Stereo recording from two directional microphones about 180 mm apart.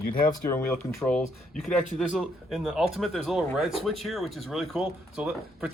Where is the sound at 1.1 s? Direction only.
5° left (ahead or behind).